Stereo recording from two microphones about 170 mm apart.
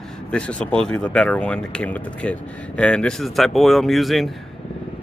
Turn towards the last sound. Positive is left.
turn(degrees=0)  # may be behind; listen again after turning